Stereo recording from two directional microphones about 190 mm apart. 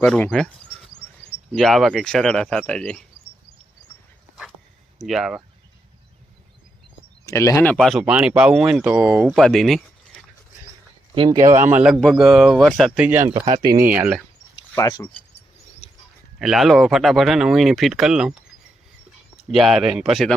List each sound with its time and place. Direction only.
0.0 s a sound: 5° left (ahead or behind)
1.5 s speech: centre (ahead or behind)
4.9 s speech: centre (ahead or behind)
7.3 s speech: 15° left (ahead or behind)
11.1 s speech: 25° right (ahead or behind)
13.3 s speech: 30° right (ahead or behind)
13.8 s speech: 10° right (ahead or behind)
14.8 s speech: 15° left (ahead or behind)
15.8 s a sound: 35° left (ahead or behind)
16.4 s speech: centre (ahead or behind)
19.5 s speech: centre (ahead or behind)